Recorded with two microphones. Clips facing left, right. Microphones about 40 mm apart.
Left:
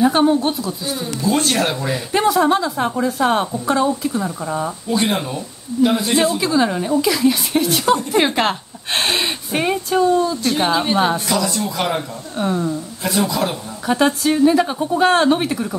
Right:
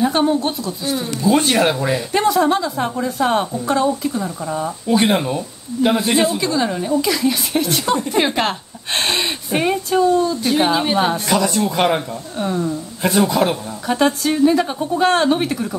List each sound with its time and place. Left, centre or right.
0.0 s a woman's voice: centre
2.1 s a woman's voice: centre
4.8 s speech: centre
6.3 s a woman's voice: centre
11.2 s speech: right
12.4 s speech: centre
13.3 s speech: right
13.8 s a woman's voice: centre